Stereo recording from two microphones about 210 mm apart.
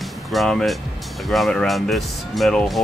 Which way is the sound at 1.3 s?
Centre (ahead or behind).